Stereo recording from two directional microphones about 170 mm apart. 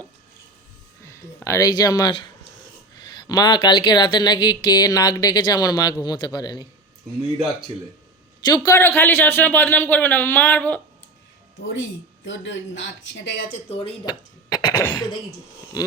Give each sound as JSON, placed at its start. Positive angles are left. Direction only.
{"t": 1.5, "sound": "speech", "side_deg": 20}
{"t": 8.4, "sound": "a man's voice", "side_deg": 25}
{"t": 11.7, "sound": "speech", "side_deg": 90}
{"t": 13.5, "sound": "speech", "side_deg": 35}
{"t": 14.0, "sound": "speech", "side_deg": 25}